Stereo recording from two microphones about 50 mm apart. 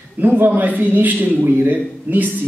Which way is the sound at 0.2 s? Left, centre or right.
Right.